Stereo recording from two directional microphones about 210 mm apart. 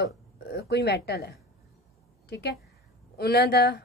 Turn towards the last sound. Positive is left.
turn(degrees=50)  # may be behind; listen again after turning